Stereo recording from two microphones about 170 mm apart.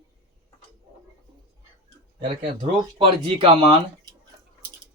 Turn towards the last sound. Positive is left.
turn(degrees=-25)  # may be behind; listen again after turning